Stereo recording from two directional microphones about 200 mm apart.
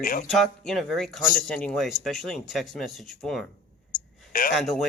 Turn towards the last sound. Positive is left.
turn(degrees=0)  # may be behind; listen again after turning